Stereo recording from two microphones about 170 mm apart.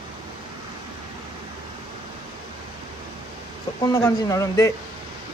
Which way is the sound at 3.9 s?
20° left (ahead or behind).